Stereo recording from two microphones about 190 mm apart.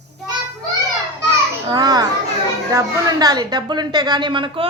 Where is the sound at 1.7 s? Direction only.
20° right (ahead or behind).